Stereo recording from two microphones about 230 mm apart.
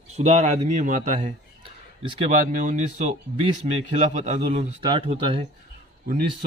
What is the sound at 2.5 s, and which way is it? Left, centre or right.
Speech, right.